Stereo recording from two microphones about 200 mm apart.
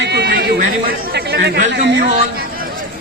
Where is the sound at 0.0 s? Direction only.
55° right (ahead or behind).